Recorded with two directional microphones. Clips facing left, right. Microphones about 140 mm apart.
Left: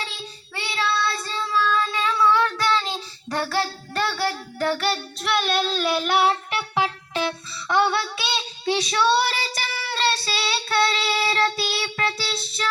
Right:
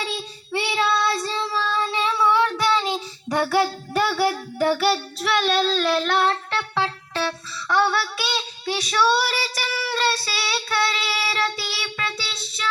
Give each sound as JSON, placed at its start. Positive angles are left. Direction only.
{"t": 0.5, "sound": "child singing", "side_deg": -20}
{"t": 2.2, "sound": "child singing", "side_deg": -20}